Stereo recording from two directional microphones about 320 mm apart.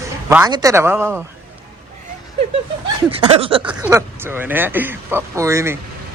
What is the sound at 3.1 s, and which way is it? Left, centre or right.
Speech, centre.